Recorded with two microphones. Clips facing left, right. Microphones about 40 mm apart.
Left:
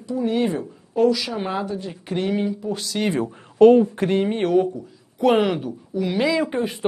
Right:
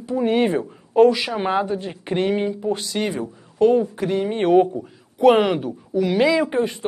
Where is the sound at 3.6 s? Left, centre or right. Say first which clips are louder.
Left 4 dB; centre.